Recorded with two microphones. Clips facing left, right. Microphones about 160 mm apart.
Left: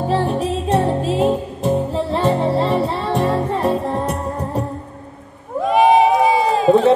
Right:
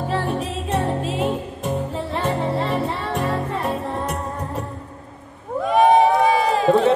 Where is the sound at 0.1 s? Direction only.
35° left (ahead or behind).